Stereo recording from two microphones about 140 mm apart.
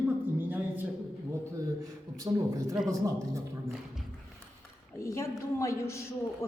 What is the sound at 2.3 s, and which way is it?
A man's voice, 30° right (ahead or behind).